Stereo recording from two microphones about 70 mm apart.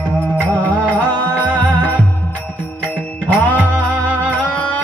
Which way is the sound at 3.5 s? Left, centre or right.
Left.